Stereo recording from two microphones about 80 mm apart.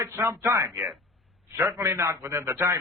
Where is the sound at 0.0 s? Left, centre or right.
Right.